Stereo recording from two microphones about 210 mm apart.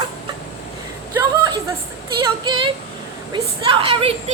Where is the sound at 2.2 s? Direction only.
20° right (ahead or behind).